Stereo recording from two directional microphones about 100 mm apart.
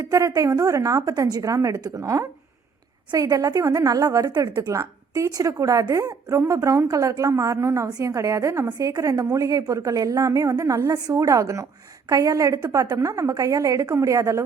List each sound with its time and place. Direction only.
0.0 s a woman's voice: 35° right (ahead or behind)